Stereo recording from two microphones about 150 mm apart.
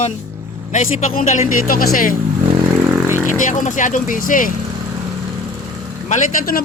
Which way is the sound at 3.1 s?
60° left (ahead or behind).